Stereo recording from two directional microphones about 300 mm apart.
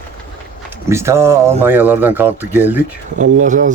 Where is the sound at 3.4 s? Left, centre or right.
Right.